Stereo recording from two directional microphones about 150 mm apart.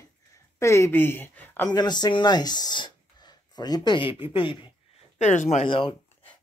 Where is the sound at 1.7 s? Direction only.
25° left (ahead or behind).